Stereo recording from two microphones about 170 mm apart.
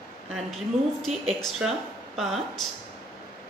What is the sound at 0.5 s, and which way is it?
Speech, centre (ahead or behind).